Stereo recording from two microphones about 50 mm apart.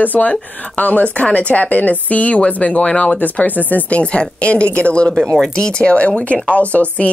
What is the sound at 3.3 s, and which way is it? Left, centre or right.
Speech, left.